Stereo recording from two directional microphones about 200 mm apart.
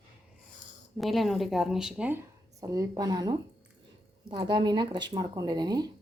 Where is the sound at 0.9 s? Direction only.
Centre (ahead or behind).